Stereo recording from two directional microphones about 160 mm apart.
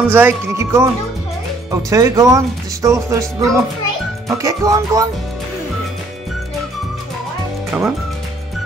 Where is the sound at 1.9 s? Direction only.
20° right (ahead or behind).